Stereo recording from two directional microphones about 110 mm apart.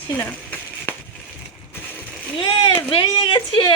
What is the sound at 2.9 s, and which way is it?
Speech, 45° left (ahead or behind).